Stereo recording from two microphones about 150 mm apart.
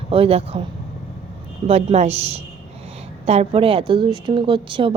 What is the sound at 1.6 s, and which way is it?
Speech, 45° right (ahead or behind).